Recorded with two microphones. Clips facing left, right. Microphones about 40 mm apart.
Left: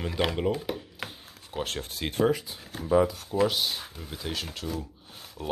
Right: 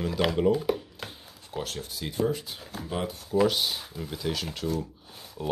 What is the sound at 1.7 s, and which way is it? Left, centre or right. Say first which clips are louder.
Speech: left 2 dB; left.